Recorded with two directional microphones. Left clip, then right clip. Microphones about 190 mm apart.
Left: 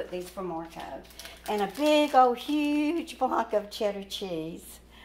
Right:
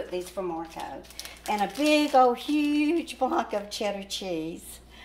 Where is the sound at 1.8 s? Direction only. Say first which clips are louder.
Even; 15° left (ahead or behind).